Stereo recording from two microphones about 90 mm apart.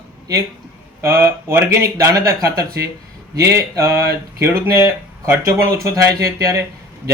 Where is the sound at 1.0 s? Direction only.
25° right (ahead or behind).